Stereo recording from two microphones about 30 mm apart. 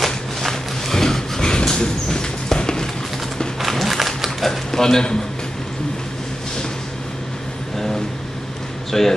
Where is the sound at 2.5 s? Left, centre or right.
Left.